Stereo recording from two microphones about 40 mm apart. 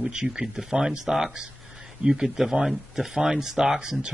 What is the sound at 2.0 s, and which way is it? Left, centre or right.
Speech, centre.